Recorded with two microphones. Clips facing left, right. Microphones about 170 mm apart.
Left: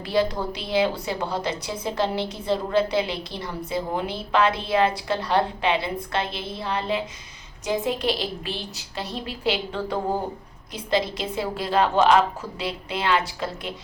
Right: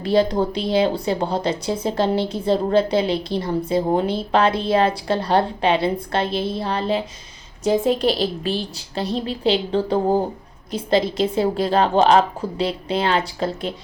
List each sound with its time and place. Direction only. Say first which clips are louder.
0.3 s a woman's voice: right 7 dB; 35° right (ahead or behind)